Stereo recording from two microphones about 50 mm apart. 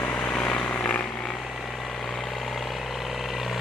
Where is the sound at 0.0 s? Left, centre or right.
Left.